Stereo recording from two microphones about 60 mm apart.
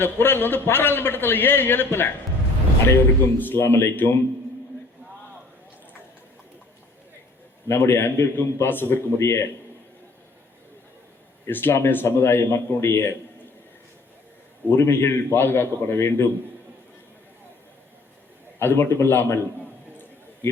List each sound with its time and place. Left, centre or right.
0.0 s a man's voice: left
7.7 s a man's voice: left
11.4 s a man's voice: left
14.7 s a man's voice: left
18.6 s a man's voice: left